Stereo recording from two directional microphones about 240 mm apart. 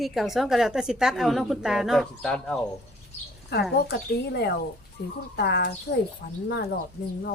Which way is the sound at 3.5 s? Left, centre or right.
Left.